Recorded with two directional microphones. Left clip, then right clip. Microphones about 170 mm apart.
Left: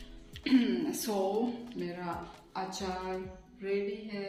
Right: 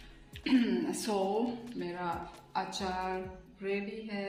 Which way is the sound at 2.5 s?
25° right (ahead or behind).